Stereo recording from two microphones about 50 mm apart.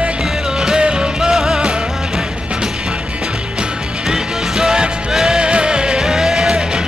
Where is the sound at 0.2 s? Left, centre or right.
Centre.